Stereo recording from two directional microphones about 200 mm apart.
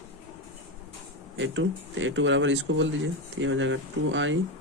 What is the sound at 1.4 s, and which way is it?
Speech, 70° right (ahead or behind).